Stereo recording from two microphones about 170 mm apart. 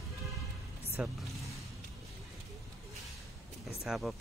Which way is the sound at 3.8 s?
5° right (ahead or behind).